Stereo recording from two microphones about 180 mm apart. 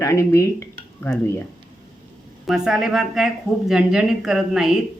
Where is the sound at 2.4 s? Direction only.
Centre (ahead or behind).